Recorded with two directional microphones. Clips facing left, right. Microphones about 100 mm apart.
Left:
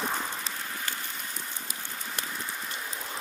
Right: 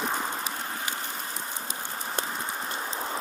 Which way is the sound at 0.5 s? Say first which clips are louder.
Right 3 dB; 40° right (ahead or behind).